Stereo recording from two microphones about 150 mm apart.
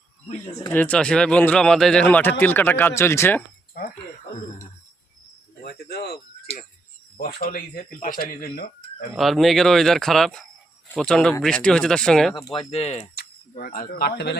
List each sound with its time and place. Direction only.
0.7 s speech: 10° left (ahead or behind)
5.6 s speech: 90° left
7.2 s speech: 75° left (ahead or behind)
9.1 s speech: centre (ahead or behind)
12.3 s speech: 30° left (ahead or behind)
12.7 s speech: 45° left (ahead or behind)
13.1 s speech: 90° left